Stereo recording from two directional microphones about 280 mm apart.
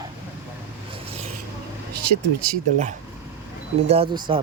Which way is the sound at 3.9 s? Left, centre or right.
Right.